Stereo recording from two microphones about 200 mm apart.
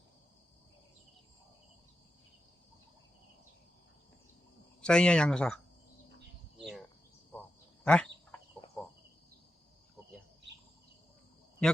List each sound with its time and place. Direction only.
4.8 s speech: 5° left (ahead or behind)
6.6 s cricket: centre (ahead or behind)
7.9 s a sound: 5° left (ahead or behind)
8.6 s cricket: 25° left (ahead or behind)